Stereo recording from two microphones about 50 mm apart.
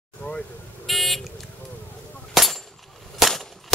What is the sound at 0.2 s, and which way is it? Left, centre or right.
Vehicle, centre.